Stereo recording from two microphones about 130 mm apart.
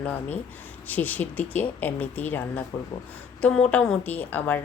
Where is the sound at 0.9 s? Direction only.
15° left (ahead or behind).